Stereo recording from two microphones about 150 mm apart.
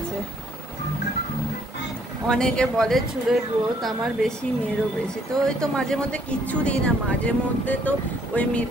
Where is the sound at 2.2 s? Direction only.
5° left (ahead or behind).